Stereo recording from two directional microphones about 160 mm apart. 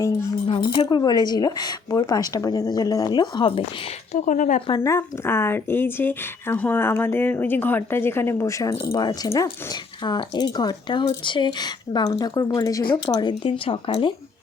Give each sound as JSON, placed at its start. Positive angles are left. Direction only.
{"t": 0.4, "sound": "speech", "side_deg": 30}
{"t": 4.1, "sound": "speech", "side_deg": 55}
{"t": 4.8, "sound": "speech", "side_deg": 15}